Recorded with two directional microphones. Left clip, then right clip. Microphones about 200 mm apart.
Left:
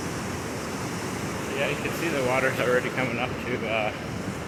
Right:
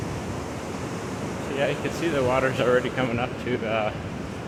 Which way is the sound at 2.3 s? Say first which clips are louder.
Right 1 dB; 25° right (ahead or behind).